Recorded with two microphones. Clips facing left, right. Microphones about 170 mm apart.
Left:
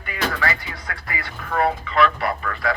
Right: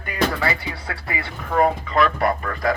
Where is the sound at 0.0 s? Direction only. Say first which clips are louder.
Right 3 dB; 30° right (ahead or behind).